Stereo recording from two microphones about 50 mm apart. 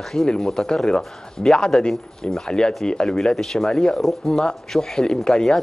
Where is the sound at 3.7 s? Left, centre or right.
Centre.